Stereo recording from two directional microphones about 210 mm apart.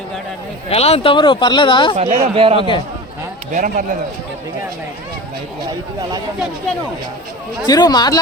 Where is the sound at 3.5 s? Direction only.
40° right (ahead or behind).